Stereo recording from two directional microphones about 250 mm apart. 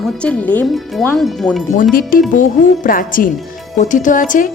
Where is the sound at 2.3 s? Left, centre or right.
Left.